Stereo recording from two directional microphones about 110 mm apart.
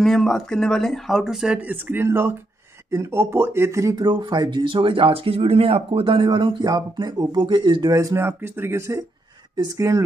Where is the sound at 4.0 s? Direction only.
45° right (ahead or behind).